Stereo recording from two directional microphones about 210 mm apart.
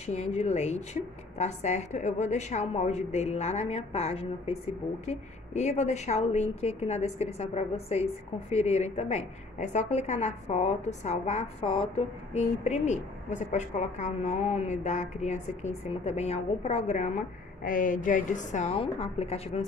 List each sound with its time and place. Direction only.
0.0 s a woman's voice: 30° left (ahead or behind)